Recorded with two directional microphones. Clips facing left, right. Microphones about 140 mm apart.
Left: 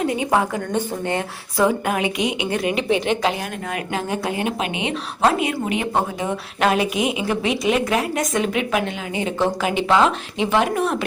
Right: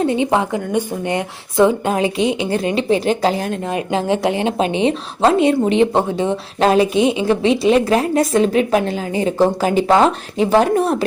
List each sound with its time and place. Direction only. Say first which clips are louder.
0.0 s a woman's voice: right 3 dB; 25° right (ahead or behind)
3.9 s a woman's voice: right 7 dB; 25° right (ahead or behind)